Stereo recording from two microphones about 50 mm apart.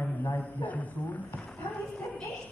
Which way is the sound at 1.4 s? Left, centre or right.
Centre.